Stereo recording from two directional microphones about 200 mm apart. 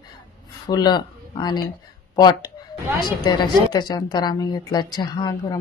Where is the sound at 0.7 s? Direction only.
20° left (ahead or behind).